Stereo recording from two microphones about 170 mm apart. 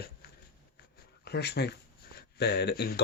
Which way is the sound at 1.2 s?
75° left (ahead or behind).